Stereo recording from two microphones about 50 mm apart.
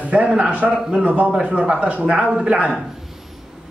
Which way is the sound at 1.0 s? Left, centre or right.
Right.